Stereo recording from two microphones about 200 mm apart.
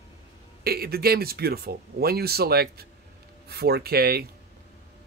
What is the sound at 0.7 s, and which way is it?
Speech, 50° right (ahead or behind).